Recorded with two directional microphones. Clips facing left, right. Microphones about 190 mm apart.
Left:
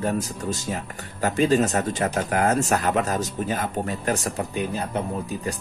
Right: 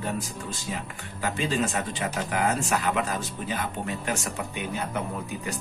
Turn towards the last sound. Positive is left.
turn(degrees=35)  # may be behind; listen again after turning